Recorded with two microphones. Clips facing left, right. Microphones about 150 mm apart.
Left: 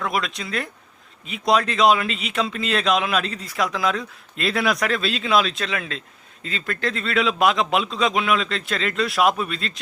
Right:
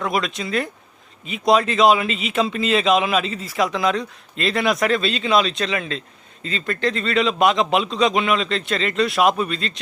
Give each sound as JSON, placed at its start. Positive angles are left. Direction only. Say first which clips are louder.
{"t": 0.0, "sound": "speech", "louder": "right 3 dB", "side_deg": 0}